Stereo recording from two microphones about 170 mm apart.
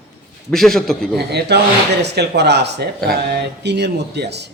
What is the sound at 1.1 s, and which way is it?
A man's voice, 75° right (ahead or behind).